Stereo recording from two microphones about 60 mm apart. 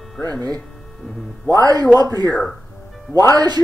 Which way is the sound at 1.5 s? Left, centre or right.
Right.